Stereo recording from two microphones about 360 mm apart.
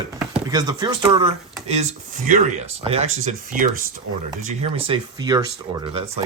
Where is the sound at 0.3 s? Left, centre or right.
Centre.